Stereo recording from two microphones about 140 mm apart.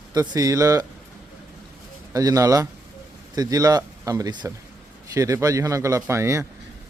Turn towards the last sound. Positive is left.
turn(degrees=-20)  # may be behind; listen again after turning